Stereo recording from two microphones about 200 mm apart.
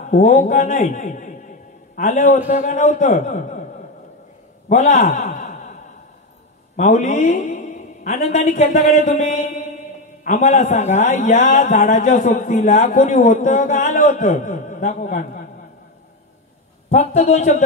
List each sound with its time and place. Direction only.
0.0 s speech: 35° left (ahead or behind)
4.6 s a sound: 40° left (ahead or behind)
6.8 s a man's voice: 35° left (ahead or behind)
16.9 s speech: 35° left (ahead or behind)